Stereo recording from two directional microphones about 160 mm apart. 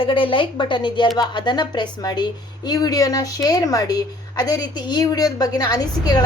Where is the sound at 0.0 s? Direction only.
30° left (ahead or behind).